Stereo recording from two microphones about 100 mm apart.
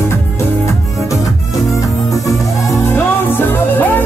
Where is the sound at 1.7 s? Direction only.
35° left (ahead or behind).